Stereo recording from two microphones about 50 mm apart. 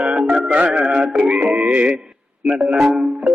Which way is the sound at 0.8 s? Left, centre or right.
Centre.